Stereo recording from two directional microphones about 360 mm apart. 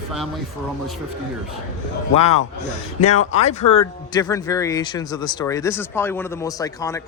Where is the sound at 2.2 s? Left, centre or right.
Centre.